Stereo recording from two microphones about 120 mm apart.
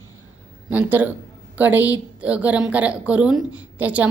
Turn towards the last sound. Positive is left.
turn(degrees=-10)  # may be behind; listen again after turning